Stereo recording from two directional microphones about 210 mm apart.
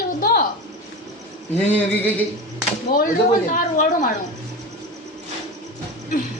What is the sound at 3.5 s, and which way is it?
Speech, 40° left (ahead or behind).